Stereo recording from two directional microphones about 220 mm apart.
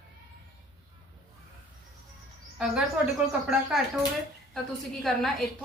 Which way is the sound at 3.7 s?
Centre (ahead or behind).